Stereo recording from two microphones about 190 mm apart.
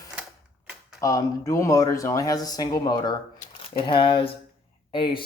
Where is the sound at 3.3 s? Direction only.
30° left (ahead or behind).